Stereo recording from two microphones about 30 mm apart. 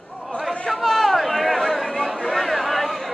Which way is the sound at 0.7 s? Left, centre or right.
Centre.